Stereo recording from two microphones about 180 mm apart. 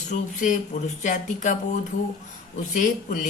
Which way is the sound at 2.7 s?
45° left (ahead or behind).